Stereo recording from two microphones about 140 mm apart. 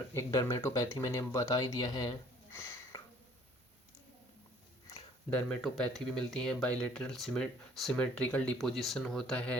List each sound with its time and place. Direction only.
0.1 s speech: 20° left (ahead or behind)
5.3 s speech: 5° left (ahead or behind)